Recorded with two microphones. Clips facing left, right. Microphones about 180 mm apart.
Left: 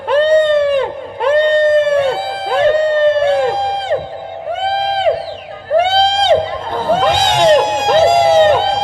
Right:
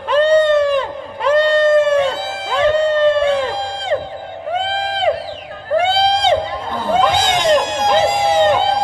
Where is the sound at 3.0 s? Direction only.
50° left (ahead or behind).